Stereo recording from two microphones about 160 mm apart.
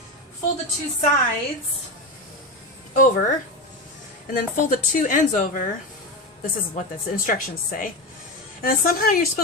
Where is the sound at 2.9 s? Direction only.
60° left (ahead or behind).